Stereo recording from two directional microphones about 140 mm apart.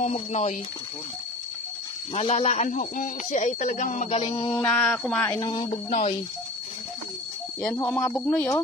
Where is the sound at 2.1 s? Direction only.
45° left (ahead or behind).